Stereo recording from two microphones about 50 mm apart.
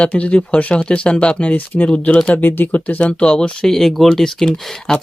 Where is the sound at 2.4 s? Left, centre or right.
Left; by 3.7 s centre.